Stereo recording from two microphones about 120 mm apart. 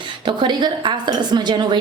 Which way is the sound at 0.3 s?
40° right (ahead or behind).